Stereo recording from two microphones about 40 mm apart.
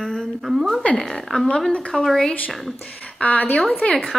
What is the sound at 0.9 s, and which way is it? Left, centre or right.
Speech, centre.